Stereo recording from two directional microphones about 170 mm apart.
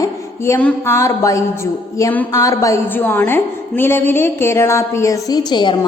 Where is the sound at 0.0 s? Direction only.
15° left (ahead or behind).